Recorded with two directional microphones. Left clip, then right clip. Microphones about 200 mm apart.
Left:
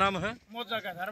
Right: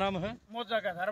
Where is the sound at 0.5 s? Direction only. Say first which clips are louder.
Right 6 dB; 35° right (ahead or behind).